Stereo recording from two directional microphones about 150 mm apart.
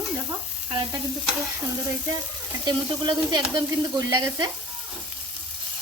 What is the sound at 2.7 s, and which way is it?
A woman's voice, 30° right (ahead or behind).